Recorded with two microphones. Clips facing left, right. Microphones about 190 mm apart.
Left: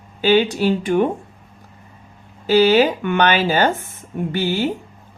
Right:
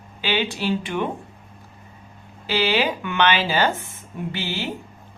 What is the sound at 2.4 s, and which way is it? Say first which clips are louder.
Speech: left 8 dB; 45° left (ahead or behind).